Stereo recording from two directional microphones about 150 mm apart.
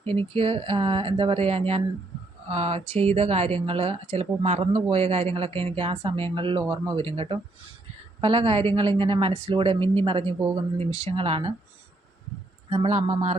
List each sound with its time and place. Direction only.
0.0 s speech: 40° right (ahead or behind)
12.7 s speech: 40° right (ahead or behind)